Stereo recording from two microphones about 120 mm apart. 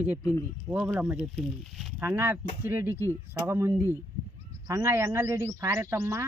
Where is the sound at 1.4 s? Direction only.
Centre (ahead or behind).